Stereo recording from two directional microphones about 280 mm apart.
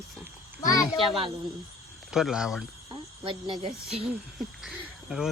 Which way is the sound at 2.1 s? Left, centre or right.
Centre.